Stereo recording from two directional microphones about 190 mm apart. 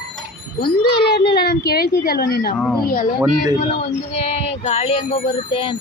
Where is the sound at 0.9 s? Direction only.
60° left (ahead or behind).